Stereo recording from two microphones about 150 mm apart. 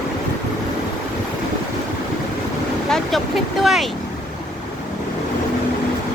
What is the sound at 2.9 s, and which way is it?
Vehicle, 5° left (ahead or behind).